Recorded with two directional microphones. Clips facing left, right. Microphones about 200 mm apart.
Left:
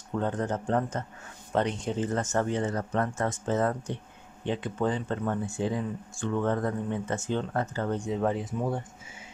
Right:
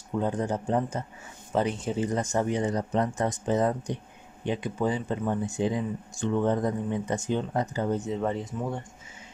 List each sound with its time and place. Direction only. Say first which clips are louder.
0.1 s speech: right 1 dB; 10° right (ahead or behind)
8.0 s speech: left 1 dB; centre (ahead or behind)